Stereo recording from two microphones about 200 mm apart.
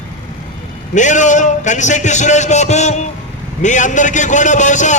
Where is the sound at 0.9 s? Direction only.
40° left (ahead or behind).